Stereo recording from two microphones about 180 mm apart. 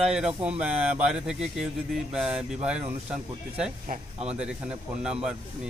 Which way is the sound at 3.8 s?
40° right (ahead or behind).